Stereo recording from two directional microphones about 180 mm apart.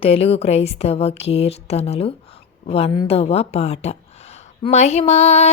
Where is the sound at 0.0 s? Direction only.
35° left (ahead or behind).